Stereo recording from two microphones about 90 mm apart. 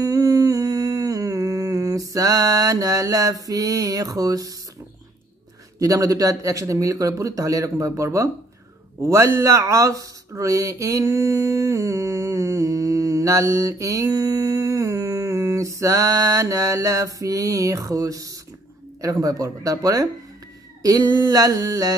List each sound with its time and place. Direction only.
0.0 s humming: 45° right (ahead or behind)
3.4 s speech: 40° right (ahead or behind)
5.8 s speech: 40° right (ahead or behind)
20.8 s a sound: 45° right (ahead or behind)